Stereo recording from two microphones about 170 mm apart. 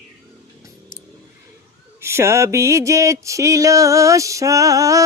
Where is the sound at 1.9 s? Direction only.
15° right (ahead or behind).